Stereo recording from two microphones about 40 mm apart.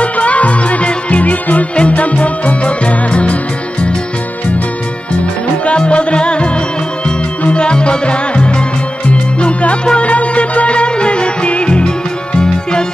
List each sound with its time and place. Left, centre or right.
0.0 s music: left
5.7 s music: left